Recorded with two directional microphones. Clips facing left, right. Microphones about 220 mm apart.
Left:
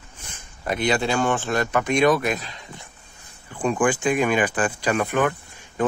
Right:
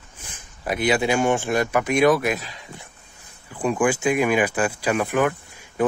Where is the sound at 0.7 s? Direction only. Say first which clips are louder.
Right 2 dB; 5° right (ahead or behind).